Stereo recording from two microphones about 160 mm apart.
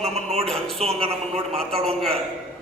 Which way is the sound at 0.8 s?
40° right (ahead or behind).